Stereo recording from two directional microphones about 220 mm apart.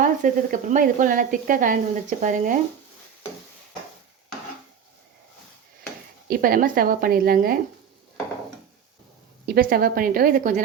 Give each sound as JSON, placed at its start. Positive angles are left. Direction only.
{"t": 0.0, "sound": "speech", "side_deg": -35}
{"t": 6.2, "sound": "speech", "side_deg": -40}
{"t": 9.6, "sound": "speech", "side_deg": -40}